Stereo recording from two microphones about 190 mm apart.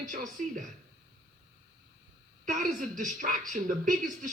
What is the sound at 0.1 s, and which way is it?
Speech, 40° right (ahead or behind).